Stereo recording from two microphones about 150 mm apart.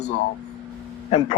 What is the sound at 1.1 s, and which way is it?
Speech, 45° left (ahead or behind).